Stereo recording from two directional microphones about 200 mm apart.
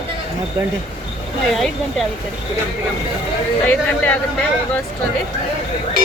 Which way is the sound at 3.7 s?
10° left (ahead or behind).